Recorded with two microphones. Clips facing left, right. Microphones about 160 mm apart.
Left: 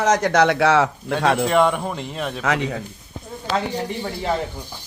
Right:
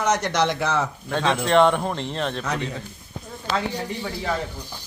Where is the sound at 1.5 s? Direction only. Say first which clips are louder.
Even; 5° left (ahead or behind).